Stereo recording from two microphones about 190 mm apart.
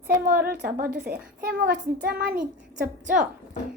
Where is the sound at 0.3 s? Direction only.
50° right (ahead or behind).